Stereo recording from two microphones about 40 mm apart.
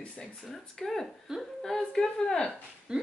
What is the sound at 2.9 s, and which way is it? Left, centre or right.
Speech, centre.